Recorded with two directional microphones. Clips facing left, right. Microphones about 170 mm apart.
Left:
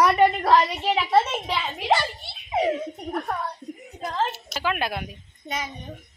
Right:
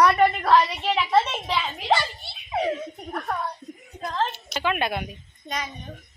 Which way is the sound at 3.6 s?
30° left (ahead or behind).